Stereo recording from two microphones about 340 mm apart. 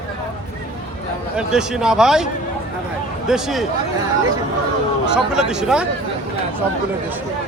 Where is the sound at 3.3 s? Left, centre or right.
Centre.